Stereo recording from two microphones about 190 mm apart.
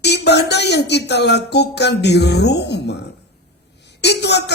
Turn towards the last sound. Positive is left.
turn(degrees=60)  # may be behind; listen again after turning